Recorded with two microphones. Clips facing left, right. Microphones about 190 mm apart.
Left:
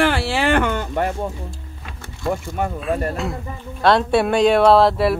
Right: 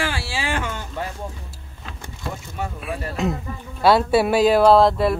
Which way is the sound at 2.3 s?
55° left (ahead or behind).